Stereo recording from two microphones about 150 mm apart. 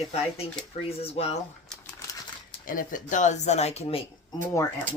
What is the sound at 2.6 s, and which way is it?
Speech, 65° left (ahead or behind).